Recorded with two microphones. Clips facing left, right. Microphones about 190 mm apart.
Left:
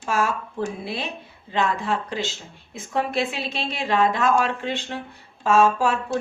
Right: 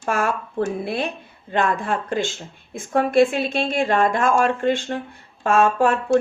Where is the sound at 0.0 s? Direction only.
55° right (ahead or behind).